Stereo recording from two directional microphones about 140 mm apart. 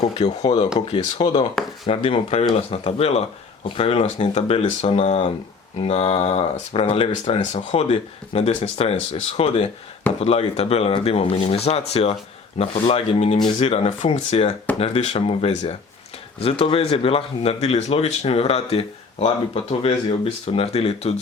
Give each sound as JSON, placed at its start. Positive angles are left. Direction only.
{"t": 0.2, "sound": "speech", "side_deg": 30}
{"t": 4.0, "sound": "speech", "side_deg": 55}